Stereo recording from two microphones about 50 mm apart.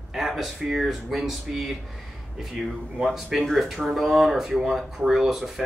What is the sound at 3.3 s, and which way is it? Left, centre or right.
Speech, centre.